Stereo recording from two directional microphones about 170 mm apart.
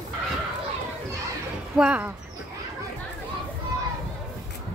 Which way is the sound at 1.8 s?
5° right (ahead or behind).